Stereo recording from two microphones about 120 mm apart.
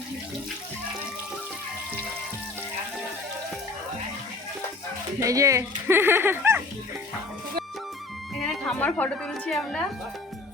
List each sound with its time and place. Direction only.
5.2 s speech: 25° right (ahead or behind)
8.4 s speech: 10° left (ahead or behind)